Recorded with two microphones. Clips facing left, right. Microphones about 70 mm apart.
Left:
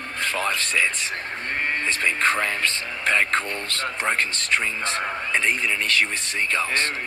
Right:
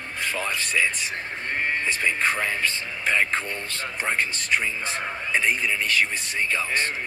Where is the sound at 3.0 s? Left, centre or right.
Left.